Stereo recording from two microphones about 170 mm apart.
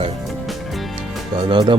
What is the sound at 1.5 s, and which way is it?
Speech, 30° right (ahead or behind).